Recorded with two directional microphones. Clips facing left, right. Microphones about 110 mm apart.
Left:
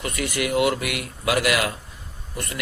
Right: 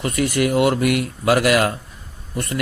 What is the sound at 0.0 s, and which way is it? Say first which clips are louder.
A man's voice: right 7 dB; 40° right (ahead or behind).